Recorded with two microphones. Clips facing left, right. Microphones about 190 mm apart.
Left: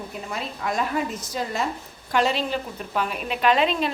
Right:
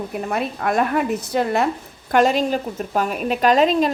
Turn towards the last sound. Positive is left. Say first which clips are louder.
# right 5 dB
turn(degrees=-40)  # may be behind; listen again after turning